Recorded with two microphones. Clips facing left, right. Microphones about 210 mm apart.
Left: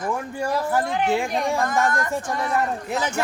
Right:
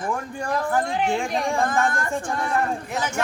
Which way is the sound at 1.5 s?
30° right (ahead or behind).